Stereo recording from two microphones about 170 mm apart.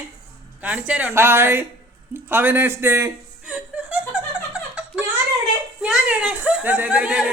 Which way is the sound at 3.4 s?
5° right (ahead or behind).